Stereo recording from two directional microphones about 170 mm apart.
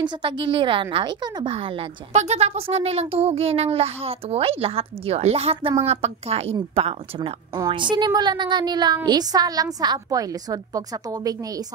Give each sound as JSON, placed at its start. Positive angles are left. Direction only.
{"t": 0.0, "sound": "a woman's voice", "side_deg": -30}
{"t": 7.2, "sound": "speech", "side_deg": -25}